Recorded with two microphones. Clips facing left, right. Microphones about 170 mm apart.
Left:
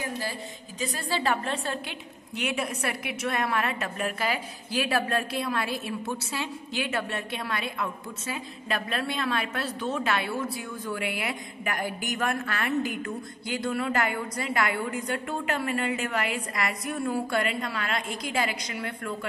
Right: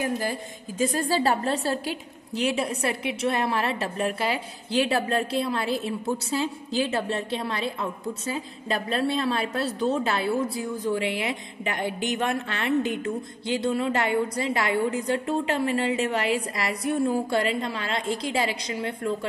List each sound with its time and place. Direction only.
0.2 s a woman's voice: 50° right (ahead or behind); by 19.1 s 30° right (ahead or behind)